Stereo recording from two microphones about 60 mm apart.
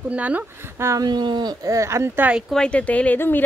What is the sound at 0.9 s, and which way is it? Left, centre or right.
Speech, right.